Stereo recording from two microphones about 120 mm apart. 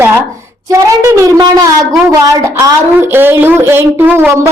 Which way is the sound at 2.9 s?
20° right (ahead or behind).